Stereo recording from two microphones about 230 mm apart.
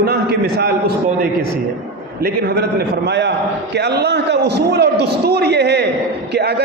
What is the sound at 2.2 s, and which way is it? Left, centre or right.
A man's voice, right.